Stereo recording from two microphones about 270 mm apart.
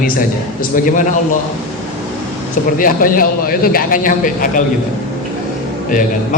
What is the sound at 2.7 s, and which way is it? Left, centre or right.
A man's voice, left.